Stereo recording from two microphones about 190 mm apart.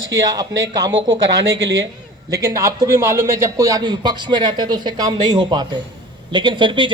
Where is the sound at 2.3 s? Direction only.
15° right (ahead or behind).